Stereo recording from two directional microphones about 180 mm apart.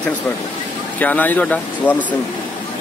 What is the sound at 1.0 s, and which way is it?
Speech, 10° left (ahead or behind).